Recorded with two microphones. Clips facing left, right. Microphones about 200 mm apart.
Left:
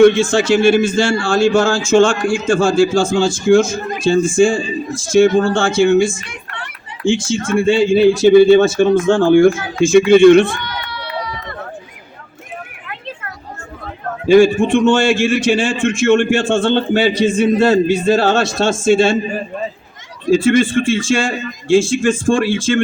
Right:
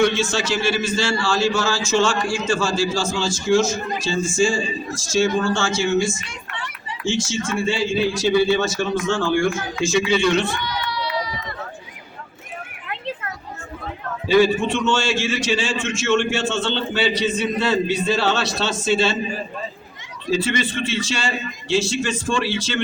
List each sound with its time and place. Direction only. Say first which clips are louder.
0.0 s a man's voice: left 10 dB; 55° left (ahead or behind)
9.8 s run: left 12 dB; 55° left (ahead or behind)
14.3 s a man's voice: left 7 dB; 50° left (ahead or behind)
20.2 s a man's voice: left 10 dB; 50° left (ahead or behind)